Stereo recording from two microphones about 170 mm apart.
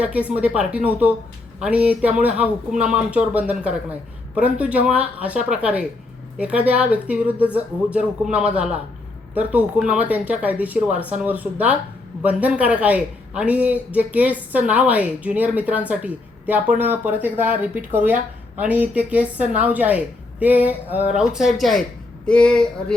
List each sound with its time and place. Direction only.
0.0 s a woman's voice: 10° right (ahead or behind)